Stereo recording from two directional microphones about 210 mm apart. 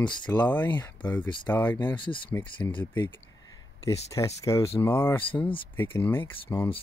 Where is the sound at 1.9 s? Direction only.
25° left (ahead or behind).